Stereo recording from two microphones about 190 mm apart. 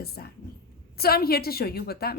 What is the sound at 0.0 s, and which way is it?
A woman's voice, 55° left (ahead or behind).